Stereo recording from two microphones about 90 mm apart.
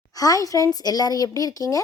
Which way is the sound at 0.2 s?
40° left (ahead or behind).